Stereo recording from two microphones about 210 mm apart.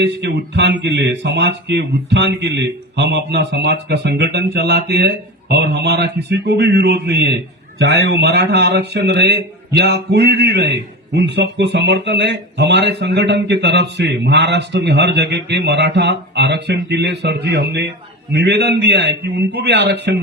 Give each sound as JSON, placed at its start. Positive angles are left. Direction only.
{"t": 0.0, "sound": "a man's voice", "side_deg": -55}